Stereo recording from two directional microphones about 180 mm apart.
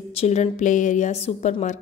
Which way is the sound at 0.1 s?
35° left (ahead or behind).